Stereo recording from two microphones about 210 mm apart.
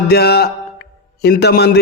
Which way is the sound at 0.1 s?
50° left (ahead or behind).